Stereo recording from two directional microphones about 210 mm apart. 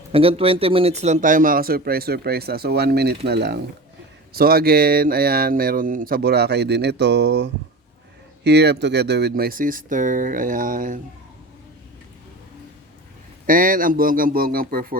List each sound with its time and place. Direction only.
0.1 s speech: 25° right (ahead or behind)
13.5 s speech: 40° right (ahead or behind)